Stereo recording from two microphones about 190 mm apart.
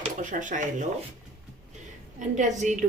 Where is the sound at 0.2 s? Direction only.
40° right (ahead or behind).